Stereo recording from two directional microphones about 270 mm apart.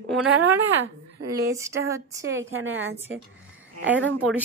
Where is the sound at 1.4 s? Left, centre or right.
Centre.